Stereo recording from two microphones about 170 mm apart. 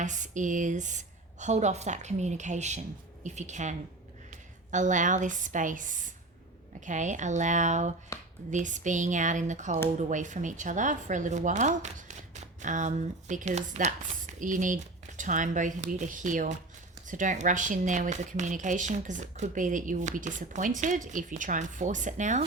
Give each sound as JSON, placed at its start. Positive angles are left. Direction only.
{"t": 0.0, "sound": "a woman's voice", "side_deg": -45}